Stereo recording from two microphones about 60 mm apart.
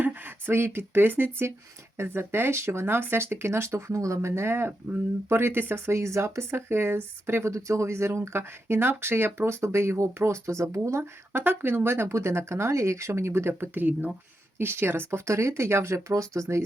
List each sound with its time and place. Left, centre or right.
0.0 s speech: right
11.3 s speech: right